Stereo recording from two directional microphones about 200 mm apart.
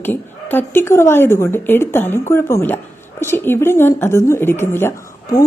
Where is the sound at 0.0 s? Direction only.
10° left (ahead or behind).